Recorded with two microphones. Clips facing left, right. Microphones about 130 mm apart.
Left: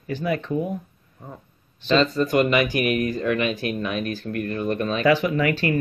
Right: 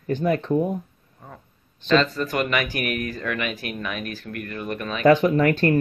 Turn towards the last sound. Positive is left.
turn(degrees=-45)  # may be behind; listen again after turning